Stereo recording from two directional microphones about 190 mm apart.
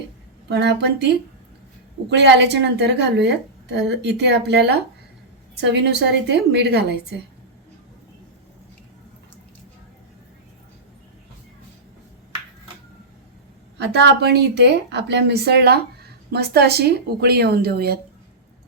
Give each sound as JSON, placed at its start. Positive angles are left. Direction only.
{"t": 0.4, "sound": "a woman's voice", "side_deg": -60}
{"t": 13.7, "sound": "a woman's voice", "side_deg": -65}